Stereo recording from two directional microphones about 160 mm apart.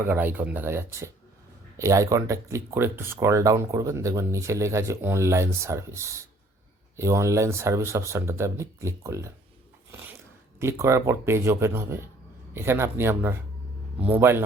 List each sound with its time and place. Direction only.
0.0 s speech: 10° right (ahead or behind)
9.9 s a sound: 15° right (ahead or behind)
10.6 s speech: 15° right (ahead or behind)